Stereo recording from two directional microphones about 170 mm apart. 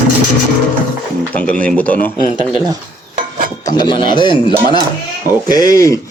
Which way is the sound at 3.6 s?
25° left (ahead or behind).